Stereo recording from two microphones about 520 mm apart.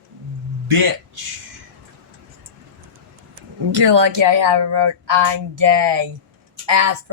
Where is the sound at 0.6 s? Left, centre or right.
Right.